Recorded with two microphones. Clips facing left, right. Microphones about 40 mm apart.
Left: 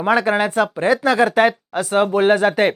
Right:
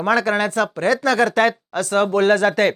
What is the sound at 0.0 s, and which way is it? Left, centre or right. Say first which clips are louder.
Speech: left 1 dB; centre.